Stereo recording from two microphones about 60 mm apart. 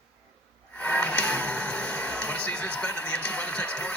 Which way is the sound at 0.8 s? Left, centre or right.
Left.